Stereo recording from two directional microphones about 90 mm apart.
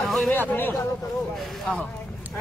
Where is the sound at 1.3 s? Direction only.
Centre (ahead or behind).